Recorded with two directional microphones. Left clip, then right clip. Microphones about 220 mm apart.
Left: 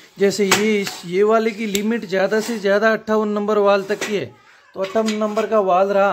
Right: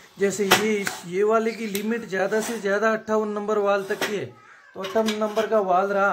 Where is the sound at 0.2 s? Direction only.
40° left (ahead or behind).